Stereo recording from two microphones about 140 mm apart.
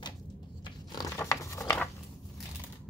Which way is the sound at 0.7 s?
25° left (ahead or behind).